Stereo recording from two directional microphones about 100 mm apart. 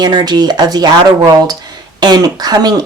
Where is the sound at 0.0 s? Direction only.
45° right (ahead or behind).